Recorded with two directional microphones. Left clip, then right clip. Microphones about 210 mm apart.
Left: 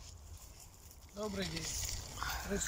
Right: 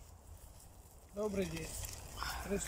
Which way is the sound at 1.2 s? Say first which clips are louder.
Right 3 dB; 10° right (ahead or behind).